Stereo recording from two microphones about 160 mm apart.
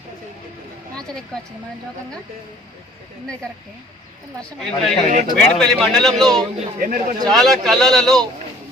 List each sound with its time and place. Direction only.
4.6 s a man's voice: centre (ahead or behind)
6.7 s speech: 60° right (ahead or behind)
7.3 s a man's voice: centre (ahead or behind)